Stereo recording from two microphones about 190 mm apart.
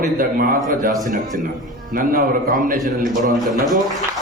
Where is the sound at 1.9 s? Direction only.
45° right (ahead or behind).